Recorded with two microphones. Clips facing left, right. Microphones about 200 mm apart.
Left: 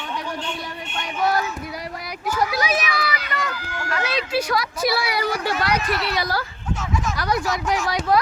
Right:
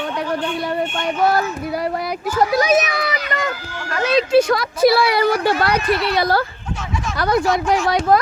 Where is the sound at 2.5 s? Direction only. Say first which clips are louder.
Right 7 dB; 45° right (ahead or behind).